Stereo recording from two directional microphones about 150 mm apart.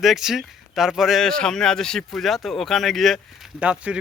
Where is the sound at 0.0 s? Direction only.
Centre (ahead or behind).